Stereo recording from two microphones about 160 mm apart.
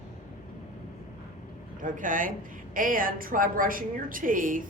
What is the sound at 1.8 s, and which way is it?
Speech, 55° right (ahead or behind).